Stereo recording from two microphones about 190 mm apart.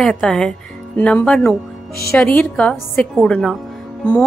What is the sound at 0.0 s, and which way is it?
A woman's voice, 5° left (ahead or behind).